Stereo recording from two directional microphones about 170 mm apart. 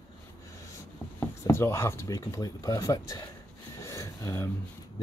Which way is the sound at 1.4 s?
15° left (ahead or behind).